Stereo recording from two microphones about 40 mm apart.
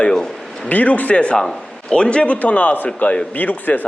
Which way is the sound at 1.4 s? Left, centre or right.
Centre.